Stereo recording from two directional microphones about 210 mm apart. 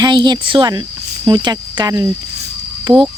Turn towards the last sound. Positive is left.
turn(degrees=-20)  # may be behind; listen again after turning